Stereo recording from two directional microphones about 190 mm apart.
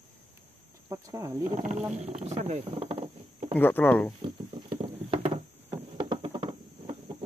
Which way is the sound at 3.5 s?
10° left (ahead or behind).